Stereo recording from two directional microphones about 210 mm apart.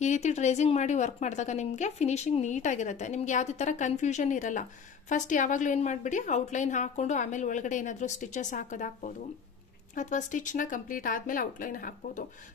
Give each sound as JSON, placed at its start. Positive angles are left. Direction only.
{"t": 0.0, "sound": "a woman's voice", "side_deg": 35}